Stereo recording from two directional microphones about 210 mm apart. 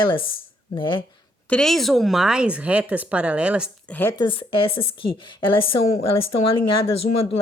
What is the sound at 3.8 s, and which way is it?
Speech, 10° left (ahead or behind).